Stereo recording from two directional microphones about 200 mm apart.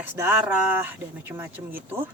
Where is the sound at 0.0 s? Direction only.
10° right (ahead or behind).